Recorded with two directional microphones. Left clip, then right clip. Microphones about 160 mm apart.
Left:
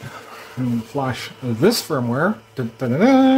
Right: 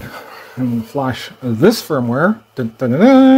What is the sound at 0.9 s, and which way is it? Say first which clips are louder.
Speech: right 4 dB; 40° right (ahead or behind).